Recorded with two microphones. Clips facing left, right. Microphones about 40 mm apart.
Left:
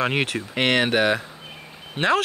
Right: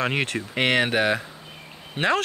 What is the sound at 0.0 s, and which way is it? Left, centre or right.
Speech, centre.